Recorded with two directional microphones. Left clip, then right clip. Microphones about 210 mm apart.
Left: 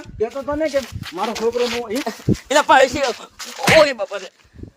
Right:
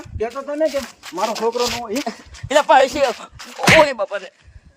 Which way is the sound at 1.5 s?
30° right (ahead or behind).